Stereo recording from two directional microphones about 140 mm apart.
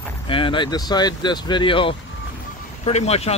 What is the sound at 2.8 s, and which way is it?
Speech, 50° left (ahead or behind).